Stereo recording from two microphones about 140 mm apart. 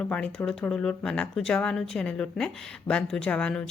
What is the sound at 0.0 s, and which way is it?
Speech, 5° left (ahead or behind).